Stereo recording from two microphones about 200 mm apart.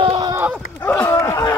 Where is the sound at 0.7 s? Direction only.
10° left (ahead or behind).